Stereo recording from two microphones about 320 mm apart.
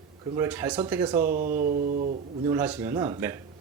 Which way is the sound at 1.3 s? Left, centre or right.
Right.